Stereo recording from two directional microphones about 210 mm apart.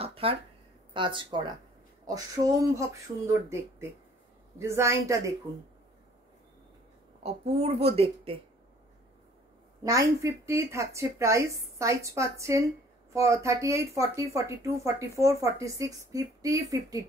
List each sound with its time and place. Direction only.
0.0 s a sound: 25° right (ahead or behind)
0.9 s a woman's voice: 20° right (ahead or behind)
7.2 s a woman's voice: 30° right (ahead or behind)
9.8 s a woman's voice: 15° right (ahead or behind)